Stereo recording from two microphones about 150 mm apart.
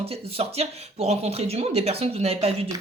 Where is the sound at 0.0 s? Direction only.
40° right (ahead or behind).